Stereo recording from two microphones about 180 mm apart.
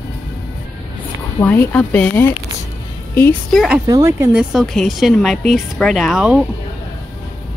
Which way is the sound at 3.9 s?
15° right (ahead or behind).